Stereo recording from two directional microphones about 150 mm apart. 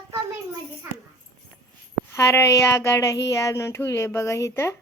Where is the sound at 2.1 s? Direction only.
20° left (ahead or behind).